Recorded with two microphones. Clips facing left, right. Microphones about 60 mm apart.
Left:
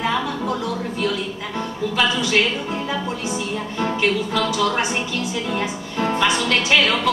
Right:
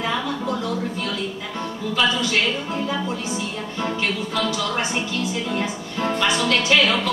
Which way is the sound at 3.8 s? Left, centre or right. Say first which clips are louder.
Left 4 dB; left.